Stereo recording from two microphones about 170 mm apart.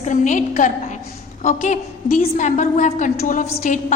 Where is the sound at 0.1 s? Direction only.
50° left (ahead or behind).